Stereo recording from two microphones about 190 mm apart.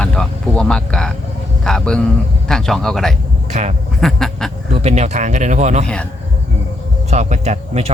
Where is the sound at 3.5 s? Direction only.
35° right (ahead or behind).